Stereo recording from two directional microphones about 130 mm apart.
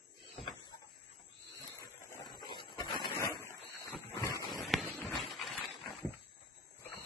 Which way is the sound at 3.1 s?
20° left (ahead or behind).